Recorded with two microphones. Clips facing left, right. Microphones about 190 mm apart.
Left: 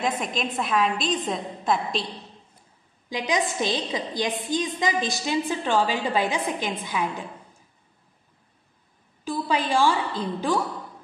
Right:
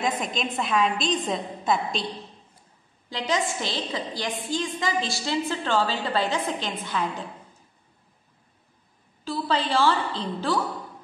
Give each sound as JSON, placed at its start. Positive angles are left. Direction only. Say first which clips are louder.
{"t": 0.0, "sound": "a woman's voice", "louder": "even", "side_deg": 0}
{"t": 3.1, "sound": "a woman's voice", "louder": "left 1 dB", "side_deg": 15}
{"t": 9.2, "sound": "a woman's voice", "louder": "left 1 dB", "side_deg": 15}